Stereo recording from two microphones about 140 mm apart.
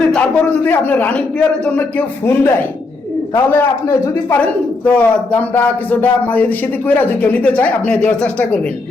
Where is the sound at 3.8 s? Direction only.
20° left (ahead or behind).